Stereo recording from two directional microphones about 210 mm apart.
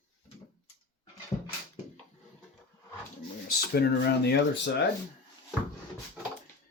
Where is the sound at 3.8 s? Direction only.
50° left (ahead or behind).